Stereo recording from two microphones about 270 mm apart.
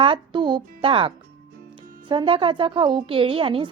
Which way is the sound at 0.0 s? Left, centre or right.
Centre.